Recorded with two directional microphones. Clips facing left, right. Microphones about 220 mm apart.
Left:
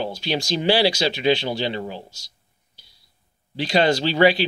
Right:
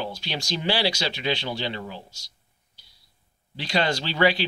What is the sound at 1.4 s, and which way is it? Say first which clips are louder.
Speech: left 5 dB; 35° left (ahead or behind).